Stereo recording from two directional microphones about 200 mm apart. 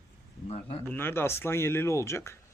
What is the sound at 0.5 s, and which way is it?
Speech, 30° left (ahead or behind).